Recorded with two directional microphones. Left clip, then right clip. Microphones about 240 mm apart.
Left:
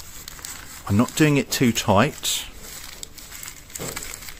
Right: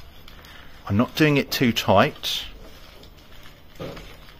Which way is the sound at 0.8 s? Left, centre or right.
Left.